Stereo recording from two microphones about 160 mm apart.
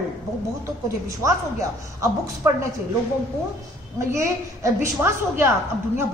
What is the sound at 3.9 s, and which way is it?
Speech, 20° right (ahead or behind).